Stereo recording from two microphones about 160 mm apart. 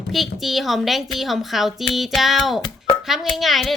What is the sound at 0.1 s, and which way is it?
Speech, centre (ahead or behind).